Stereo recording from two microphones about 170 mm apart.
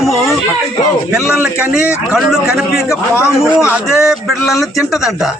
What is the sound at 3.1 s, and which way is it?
Speech, 15° left (ahead or behind).